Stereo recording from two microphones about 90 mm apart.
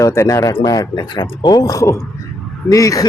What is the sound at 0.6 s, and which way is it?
Speech, 45° left (ahead or behind).